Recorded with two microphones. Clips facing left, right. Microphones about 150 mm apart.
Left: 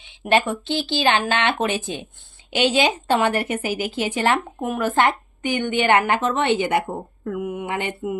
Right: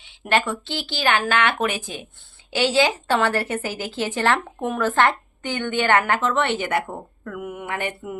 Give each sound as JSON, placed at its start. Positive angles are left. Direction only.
{"t": 0.0, "sound": "a woman's voice", "side_deg": 20}